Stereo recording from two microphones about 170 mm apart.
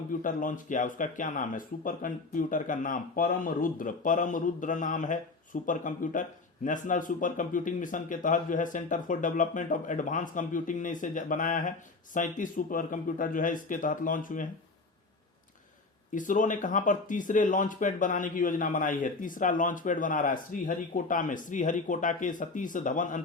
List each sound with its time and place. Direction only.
0.1 s speech: 50° left (ahead or behind)
16.1 s speech: 50° left (ahead or behind)